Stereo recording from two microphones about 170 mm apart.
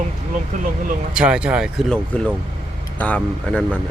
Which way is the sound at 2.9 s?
10° left (ahead or behind).